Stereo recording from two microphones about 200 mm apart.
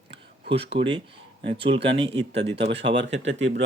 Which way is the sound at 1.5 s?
25° right (ahead or behind).